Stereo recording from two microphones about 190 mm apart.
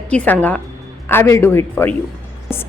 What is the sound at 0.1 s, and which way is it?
A woman's voice, 5° left (ahead or behind).